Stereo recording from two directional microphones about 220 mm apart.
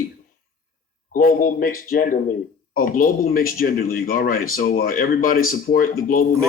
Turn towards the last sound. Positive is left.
turn(degrees=40)  # may be behind; listen again after turning